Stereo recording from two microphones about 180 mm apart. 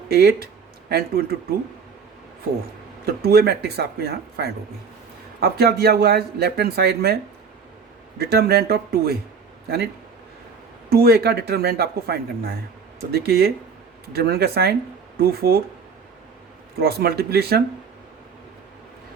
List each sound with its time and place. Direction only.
0.1 s speech: 60° right (ahead or behind)
3.2 s speech: 60° right (ahead or behind)
8.2 s speech: 60° right (ahead or behind)
16.8 s speech: 60° right (ahead or behind)